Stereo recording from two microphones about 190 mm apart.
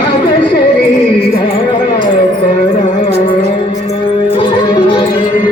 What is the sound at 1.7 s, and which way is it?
Music, 25° left (ahead or behind).